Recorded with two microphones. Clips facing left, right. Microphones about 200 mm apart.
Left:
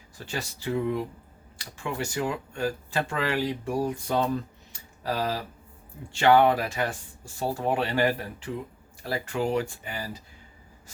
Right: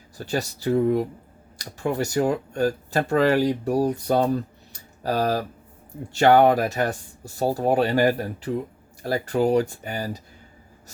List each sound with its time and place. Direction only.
0.2 s speech: 40° right (ahead or behind)